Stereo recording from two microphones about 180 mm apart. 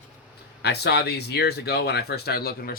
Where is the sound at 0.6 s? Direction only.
65° left (ahead or behind).